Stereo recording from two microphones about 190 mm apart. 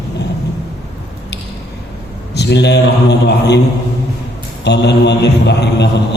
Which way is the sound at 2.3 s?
60° left (ahead or behind).